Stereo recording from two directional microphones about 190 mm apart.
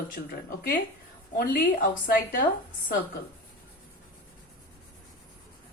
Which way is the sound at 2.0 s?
45° left (ahead or behind).